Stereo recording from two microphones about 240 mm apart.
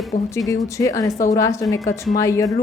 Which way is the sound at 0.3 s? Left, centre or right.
Centre.